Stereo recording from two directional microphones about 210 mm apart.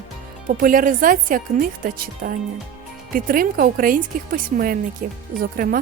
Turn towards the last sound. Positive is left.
turn(degrees=-40)  # may be behind; listen again after turning